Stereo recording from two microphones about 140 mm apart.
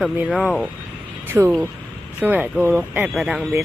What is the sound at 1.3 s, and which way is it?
Speech, 15° right (ahead or behind).